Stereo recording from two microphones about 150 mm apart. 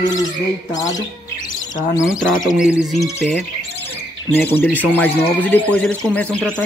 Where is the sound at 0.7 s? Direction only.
25° left (ahead or behind).